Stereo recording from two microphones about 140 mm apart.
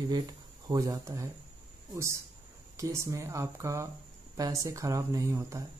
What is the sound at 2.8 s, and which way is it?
Speech, 20° right (ahead or behind).